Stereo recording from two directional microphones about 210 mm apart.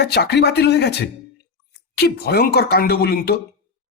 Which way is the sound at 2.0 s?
50° left (ahead or behind).